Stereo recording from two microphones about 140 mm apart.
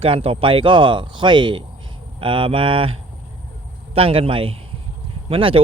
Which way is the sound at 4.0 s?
40° right (ahead or behind).